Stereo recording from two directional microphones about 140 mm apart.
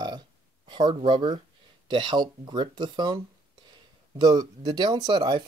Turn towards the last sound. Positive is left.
turn(degrees=-35)  # may be behind; listen again after turning